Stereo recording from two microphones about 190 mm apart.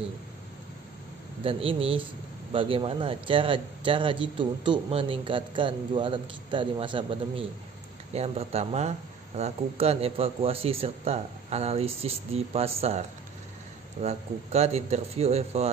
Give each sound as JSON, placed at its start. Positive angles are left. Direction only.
{"t": 1.4, "sound": "a man's voice", "side_deg": -30}
{"t": 14.0, "sound": "speech", "side_deg": -35}